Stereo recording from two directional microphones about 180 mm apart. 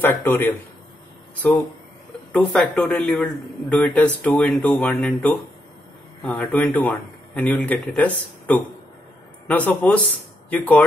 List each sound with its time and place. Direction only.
0.3 s a man's voice: 10° left (ahead or behind)
2.3 s a man's voice: 5° left (ahead or behind)